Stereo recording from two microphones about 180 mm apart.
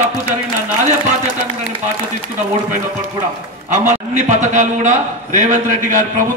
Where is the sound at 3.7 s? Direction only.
40° right (ahead or behind).